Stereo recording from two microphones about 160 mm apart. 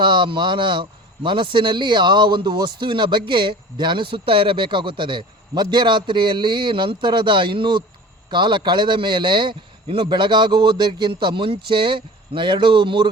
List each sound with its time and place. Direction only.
0.0 s speech: 30° right (ahead or behind)